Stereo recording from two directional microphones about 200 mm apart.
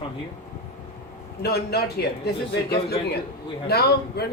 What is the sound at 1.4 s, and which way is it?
Speech, 55° left (ahead or behind).